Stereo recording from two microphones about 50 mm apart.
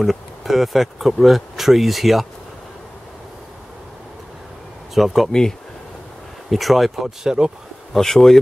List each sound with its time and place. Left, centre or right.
0.0 s speech: centre
4.9 s speech: centre
6.5 s speech: centre
7.9 s speech: centre